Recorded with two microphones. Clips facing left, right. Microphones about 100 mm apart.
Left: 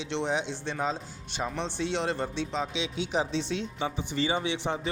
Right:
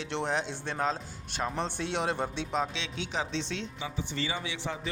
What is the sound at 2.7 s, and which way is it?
A man's voice, 10° left (ahead or behind).